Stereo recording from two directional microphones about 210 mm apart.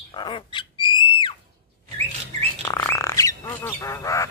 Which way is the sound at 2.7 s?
15° left (ahead or behind).